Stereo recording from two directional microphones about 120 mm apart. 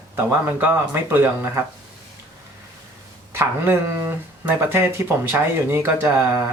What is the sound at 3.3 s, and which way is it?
Speech, 20° right (ahead or behind).